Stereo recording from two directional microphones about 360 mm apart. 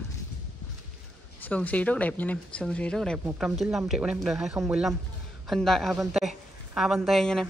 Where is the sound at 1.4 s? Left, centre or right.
Centre.